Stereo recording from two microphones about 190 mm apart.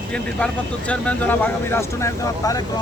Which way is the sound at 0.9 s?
10° left (ahead or behind).